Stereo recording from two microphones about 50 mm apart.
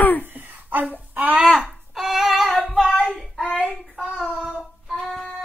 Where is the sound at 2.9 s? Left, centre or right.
Left.